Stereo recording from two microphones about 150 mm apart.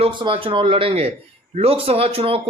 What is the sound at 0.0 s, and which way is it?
A man's voice, 35° right (ahead or behind).